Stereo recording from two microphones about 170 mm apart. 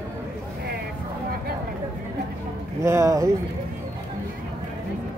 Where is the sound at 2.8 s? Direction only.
20° right (ahead or behind).